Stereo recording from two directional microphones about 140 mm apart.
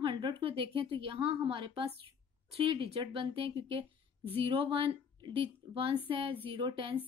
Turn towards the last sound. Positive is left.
turn(degrees=-35)  # may be behind; listen again after turning